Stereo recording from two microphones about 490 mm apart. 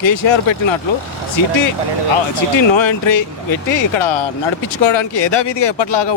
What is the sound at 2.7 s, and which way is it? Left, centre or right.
Speech, left.